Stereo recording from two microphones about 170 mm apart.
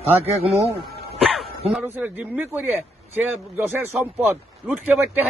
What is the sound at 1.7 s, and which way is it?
Speech, 10° right (ahead or behind).